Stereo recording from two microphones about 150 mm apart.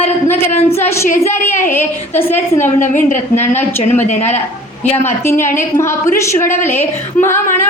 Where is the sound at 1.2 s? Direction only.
15° left (ahead or behind).